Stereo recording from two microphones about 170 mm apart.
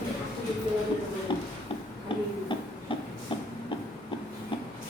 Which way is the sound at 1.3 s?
30° left (ahead or behind).